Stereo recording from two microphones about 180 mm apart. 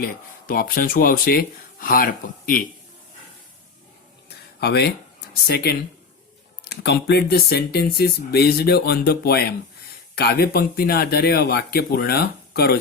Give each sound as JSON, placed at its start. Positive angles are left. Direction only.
{"t": 0.0, "sound": "speech", "side_deg": 50}
{"t": 4.3, "sound": "a sound", "side_deg": 65}
{"t": 5.5, "sound": "speech", "side_deg": 60}